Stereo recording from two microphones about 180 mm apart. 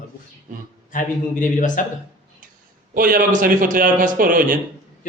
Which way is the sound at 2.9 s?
50° right (ahead or behind).